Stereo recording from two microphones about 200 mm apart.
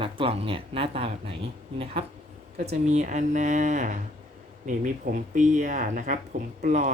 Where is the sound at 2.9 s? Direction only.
35° right (ahead or behind).